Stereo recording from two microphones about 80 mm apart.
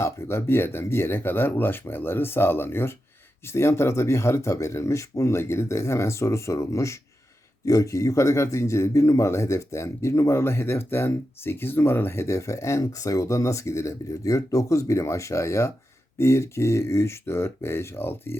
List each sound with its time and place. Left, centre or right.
0.0 s a man's voice: left